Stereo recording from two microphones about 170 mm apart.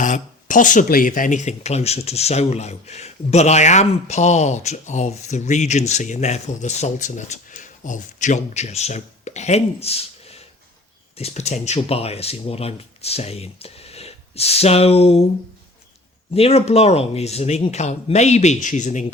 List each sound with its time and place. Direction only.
0.0 s speech: 50° left (ahead or behind)
16.3 s speech: 35° left (ahead or behind)